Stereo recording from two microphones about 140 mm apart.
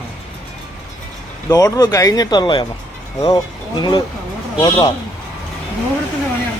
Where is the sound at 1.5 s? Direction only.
25° left (ahead or behind).